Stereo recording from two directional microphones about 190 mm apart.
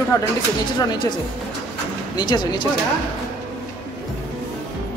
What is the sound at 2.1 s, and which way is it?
Speech, 25° left (ahead or behind).